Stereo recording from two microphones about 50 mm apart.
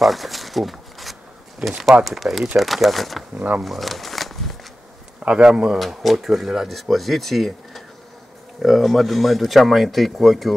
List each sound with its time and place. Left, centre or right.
0.0 s a sound: centre
2.0 s speech: centre
3.3 s speech: right
3.6 s a sound: centre
5.2 s speech: centre
5.8 s speech: centre